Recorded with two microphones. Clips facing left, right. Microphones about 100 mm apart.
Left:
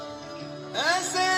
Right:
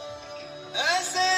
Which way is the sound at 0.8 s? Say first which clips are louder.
Even; 60° left (ahead or behind).